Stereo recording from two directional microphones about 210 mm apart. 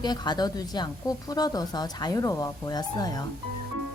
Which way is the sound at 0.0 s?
20° left (ahead or behind).